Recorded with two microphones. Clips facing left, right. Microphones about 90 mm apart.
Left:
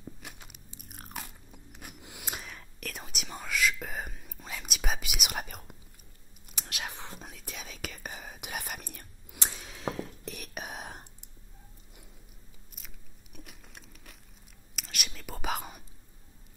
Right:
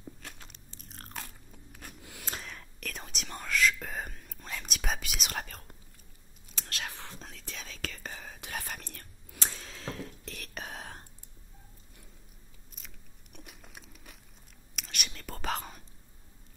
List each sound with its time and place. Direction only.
0.2 s biting: 10° left (ahead or behind)
2.4 s whispering: 5° left (ahead or behind)
12.7 s crunch: 5° left (ahead or behind)
14.8 s whispering: centre (ahead or behind)